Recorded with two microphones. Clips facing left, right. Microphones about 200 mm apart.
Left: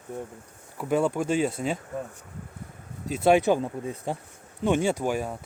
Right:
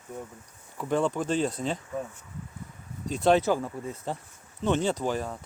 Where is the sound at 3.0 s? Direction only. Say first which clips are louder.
Left 2 dB; 5° left (ahead or behind).